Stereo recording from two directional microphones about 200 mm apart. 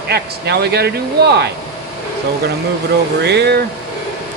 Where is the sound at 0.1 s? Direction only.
55° right (ahead or behind).